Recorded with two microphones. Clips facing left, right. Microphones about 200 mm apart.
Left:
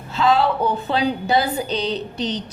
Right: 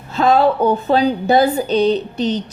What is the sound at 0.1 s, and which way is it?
A woman's voice, 50° right (ahead or behind).